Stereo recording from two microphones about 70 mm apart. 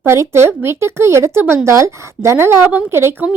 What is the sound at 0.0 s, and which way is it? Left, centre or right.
Speech, right.